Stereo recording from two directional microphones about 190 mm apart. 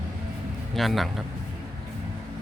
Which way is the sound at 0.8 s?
Centre (ahead or behind).